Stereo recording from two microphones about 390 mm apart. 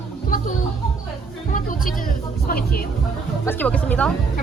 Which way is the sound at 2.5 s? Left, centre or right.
Left.